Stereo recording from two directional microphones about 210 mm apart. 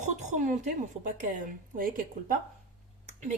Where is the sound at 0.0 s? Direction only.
35° right (ahead or behind).